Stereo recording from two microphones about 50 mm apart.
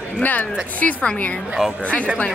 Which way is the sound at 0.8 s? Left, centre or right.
Left.